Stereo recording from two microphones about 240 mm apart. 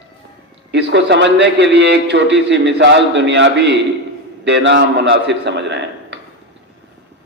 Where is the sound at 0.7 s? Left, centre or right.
Right.